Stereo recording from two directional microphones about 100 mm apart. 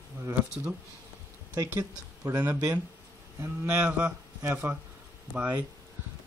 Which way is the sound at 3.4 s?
20° right (ahead or behind).